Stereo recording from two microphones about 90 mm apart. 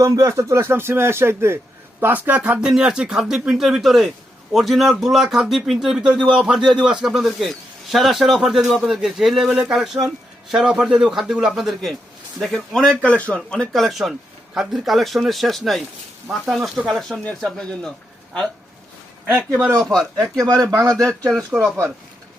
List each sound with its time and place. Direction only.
0.0 s a man's voice: 35° right (ahead or behind); by 17.9 s 5° left (ahead or behind)
19.8 s a man's voice: centre (ahead or behind)
20.3 s speech: 40° right (ahead or behind)
20.9 s a man's voice: 5° left (ahead or behind)